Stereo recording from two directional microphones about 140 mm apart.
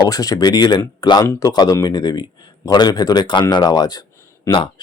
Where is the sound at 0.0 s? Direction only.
25° left (ahead or behind).